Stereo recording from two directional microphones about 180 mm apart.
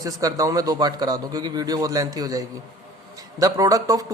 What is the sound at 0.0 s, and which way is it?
A man's voice, 20° right (ahead or behind).